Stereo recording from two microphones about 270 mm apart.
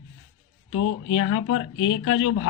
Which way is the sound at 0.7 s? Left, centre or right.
Left.